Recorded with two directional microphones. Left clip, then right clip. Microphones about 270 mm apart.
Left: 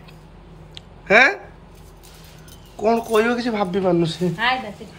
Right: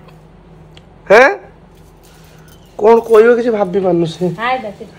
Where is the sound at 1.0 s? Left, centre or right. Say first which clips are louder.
Right 7 dB; centre.